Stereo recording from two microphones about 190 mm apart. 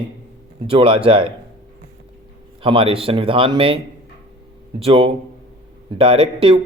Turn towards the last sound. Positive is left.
turn(degrees=-30)  # may be behind; listen again after turning